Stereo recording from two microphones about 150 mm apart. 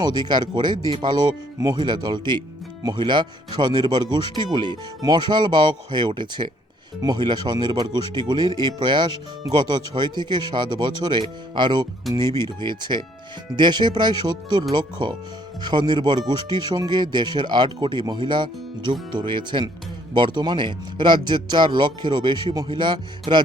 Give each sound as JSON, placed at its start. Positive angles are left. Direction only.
{"t": 0.0, "sound": "speech", "side_deg": -30}